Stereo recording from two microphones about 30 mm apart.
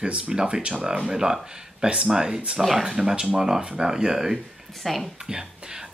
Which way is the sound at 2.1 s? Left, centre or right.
Right.